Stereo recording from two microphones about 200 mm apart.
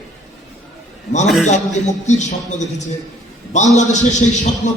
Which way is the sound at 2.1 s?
35° left (ahead or behind).